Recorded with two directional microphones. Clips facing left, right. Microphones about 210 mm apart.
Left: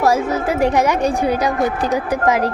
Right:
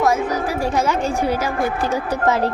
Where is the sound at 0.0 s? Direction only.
25° left (ahead or behind).